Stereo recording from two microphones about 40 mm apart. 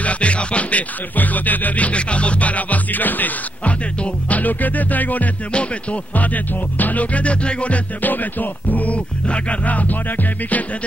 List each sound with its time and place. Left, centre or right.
0.0 s music: left
3.6 s music: left
5.5 s music: left
8.0 s music: left
9.7 s music: left